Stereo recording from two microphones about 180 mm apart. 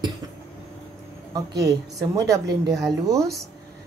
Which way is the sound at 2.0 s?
20° right (ahead or behind).